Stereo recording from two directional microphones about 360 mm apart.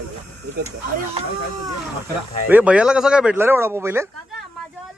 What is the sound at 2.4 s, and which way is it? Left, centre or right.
Speech, centre.